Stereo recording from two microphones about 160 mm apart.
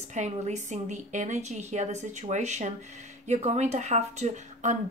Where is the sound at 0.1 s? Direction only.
45° right (ahead or behind).